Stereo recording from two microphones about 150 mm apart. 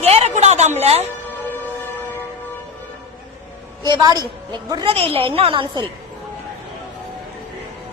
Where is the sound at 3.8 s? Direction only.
25° right (ahead or behind).